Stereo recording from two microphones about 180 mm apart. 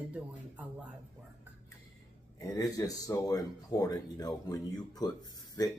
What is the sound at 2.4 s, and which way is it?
Speech, 20° left (ahead or behind).